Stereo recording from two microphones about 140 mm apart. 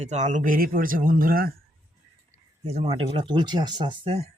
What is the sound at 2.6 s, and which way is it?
Speech, 45° right (ahead or behind).